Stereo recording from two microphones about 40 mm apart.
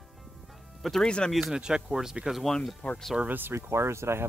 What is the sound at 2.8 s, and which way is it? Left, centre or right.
Speech, left.